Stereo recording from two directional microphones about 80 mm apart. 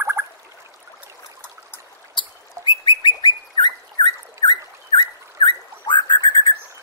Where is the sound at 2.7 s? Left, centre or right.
Left.